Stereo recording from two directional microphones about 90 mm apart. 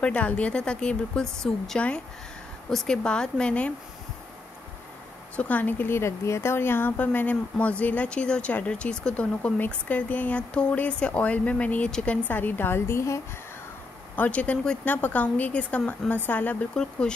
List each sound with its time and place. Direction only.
0.0 s a woman's voice: 15° left (ahead or behind)
5.3 s a woman's voice: 15° left (ahead or behind); by 13.2 s 30° left (ahead or behind)
14.1 s a woman's voice: 15° left (ahead or behind)